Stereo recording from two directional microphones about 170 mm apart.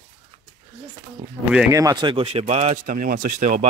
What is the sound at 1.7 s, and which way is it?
Speech, 20° right (ahead or behind).